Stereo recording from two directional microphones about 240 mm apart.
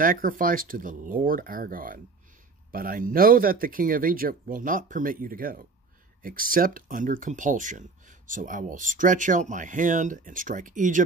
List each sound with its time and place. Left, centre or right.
0.0 s speech: right